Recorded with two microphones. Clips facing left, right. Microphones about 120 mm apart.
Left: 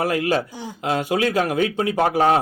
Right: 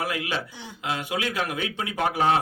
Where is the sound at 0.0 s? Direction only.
45° left (ahead or behind).